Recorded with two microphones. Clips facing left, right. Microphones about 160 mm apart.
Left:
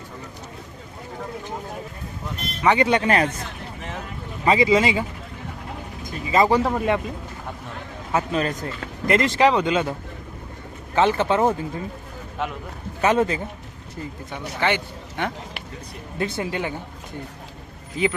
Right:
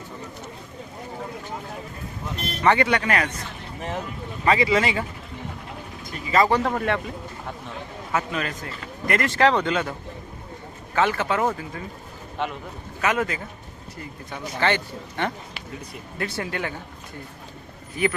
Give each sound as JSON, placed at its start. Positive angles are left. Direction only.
{"t": 2.6, "sound": "speech", "side_deg": 20}
{"t": 4.4, "sound": "speech", "side_deg": 15}
{"t": 6.3, "sound": "speech", "side_deg": 15}
{"t": 8.1, "sound": "speech", "side_deg": 30}
{"t": 10.9, "sound": "speech", "side_deg": 25}
{"t": 12.4, "sound": "a man's voice", "side_deg": 5}
{"t": 13.0, "sound": "speech", "side_deg": 30}
{"t": 14.3, "sound": "speech", "side_deg": 15}
{"t": 18.0, "sound": "speech", "side_deg": 20}